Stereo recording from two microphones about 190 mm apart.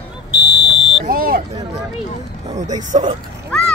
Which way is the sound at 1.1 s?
50° right (ahead or behind).